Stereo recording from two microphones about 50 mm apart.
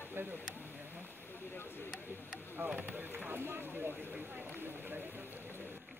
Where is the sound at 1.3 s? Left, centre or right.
Left.